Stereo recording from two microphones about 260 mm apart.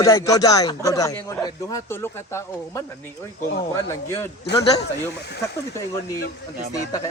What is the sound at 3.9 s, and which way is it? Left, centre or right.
Speech, centre.